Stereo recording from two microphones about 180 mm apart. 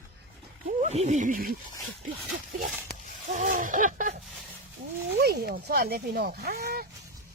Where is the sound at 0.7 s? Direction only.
40° right (ahead or behind).